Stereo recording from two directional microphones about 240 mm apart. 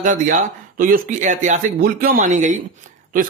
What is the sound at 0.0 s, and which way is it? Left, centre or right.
A man's voice, right.